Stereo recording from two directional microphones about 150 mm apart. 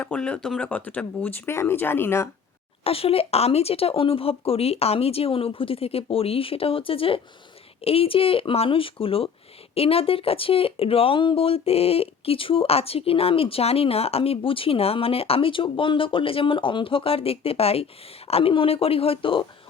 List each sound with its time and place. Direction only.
0.0 s speech: 10° left (ahead or behind)
2.8 s speech: 40° left (ahead or behind)